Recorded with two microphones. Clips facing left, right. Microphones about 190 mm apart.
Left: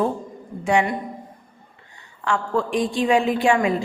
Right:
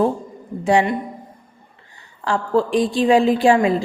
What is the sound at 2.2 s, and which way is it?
A woman's voice, 35° right (ahead or behind).